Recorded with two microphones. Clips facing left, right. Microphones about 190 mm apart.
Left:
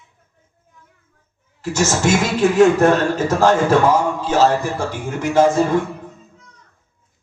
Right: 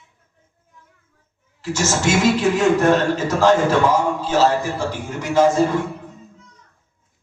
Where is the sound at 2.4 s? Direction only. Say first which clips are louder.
Left 4 dB; 55° left (ahead or behind).